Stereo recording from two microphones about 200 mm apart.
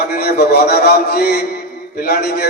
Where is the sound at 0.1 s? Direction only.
50° left (ahead or behind).